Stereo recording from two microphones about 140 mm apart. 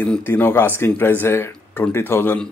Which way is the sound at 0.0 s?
10° left (ahead or behind).